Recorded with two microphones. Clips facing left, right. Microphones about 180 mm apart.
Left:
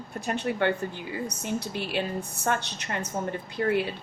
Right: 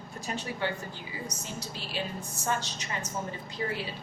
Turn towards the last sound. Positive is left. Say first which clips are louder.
# left 8 dB
turn(degrees=60)  # may be behind; listen again after turning